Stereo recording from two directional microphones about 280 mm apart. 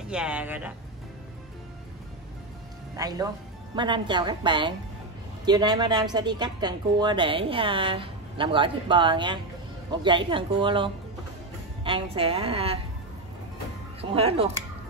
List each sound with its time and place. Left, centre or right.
0.0 s speech: centre
3.0 s a woman's voice: centre
14.1 s a woman's voice: centre